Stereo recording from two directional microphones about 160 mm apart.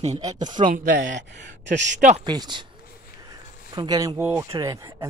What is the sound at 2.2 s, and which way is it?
Speech, 25° right (ahead or behind).